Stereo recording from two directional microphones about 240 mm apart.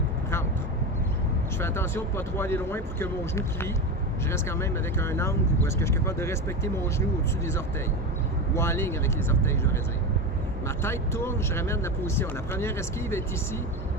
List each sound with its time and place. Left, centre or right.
1.5 s speech: centre
8.5 s speech: centre
10.8 s speech: centre